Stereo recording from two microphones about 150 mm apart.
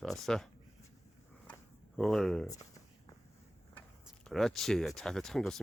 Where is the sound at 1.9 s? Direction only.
Centre (ahead or behind).